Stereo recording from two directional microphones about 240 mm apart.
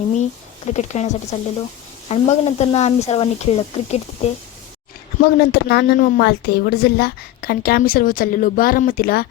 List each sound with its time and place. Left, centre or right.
0.7 s speech: left
5.2 s speech: left